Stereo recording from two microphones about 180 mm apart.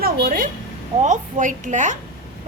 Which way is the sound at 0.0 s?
50° right (ahead or behind).